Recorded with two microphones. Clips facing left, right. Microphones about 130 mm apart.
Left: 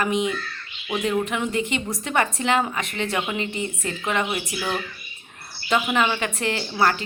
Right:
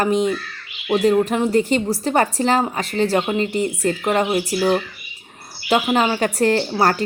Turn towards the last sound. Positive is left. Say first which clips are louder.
# right 4 dB
turn(degrees=-40)  # may be behind; listen again after turning